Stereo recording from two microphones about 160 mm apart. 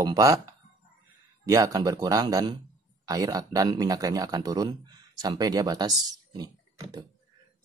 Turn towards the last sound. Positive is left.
turn(degrees=-25)  # may be behind; listen again after turning